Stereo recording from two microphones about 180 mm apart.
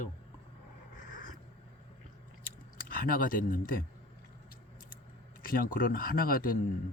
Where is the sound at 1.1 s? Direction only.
50° left (ahead or behind).